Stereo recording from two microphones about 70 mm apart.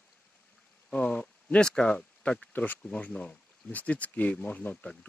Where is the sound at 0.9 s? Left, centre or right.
Centre.